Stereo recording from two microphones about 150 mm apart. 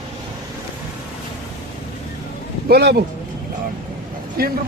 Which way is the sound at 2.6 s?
90° right.